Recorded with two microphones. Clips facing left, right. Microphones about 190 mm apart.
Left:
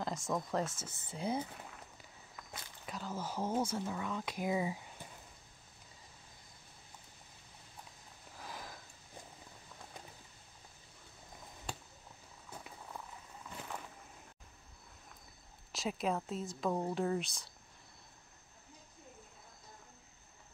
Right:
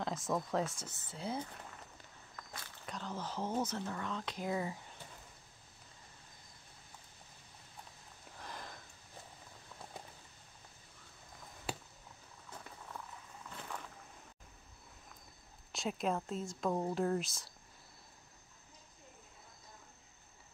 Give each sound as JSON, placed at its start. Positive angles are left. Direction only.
{"t": 0.0, "sound": "speech", "side_deg": 0}
{"t": 1.1, "sound": "speech", "side_deg": 15}
{"t": 2.8, "sound": "speech", "side_deg": 5}
{"t": 8.4, "sound": "sniff", "side_deg": 5}
{"t": 12.4, "sound": "a sound", "side_deg": 10}
{"t": 13.6, "sound": "boat", "side_deg": 10}
{"t": 15.7, "sound": "speech", "side_deg": 0}